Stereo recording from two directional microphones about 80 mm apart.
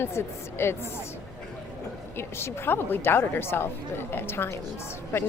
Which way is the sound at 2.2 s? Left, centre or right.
Left.